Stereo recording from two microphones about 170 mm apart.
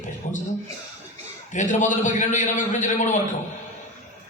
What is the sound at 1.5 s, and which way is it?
A man's voice, 45° left (ahead or behind).